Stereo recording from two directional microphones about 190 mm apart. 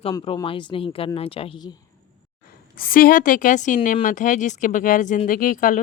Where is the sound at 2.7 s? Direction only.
50° left (ahead or behind).